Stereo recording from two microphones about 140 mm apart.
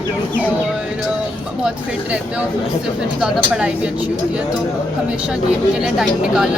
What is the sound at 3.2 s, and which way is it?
Speech, 5° right (ahead or behind).